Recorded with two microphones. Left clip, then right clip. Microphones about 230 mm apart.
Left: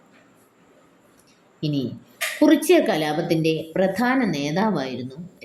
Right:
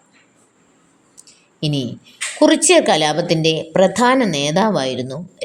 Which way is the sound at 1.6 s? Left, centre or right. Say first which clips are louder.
Right 4 dB; right.